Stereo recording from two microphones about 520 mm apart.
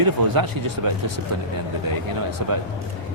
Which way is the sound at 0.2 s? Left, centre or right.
Right.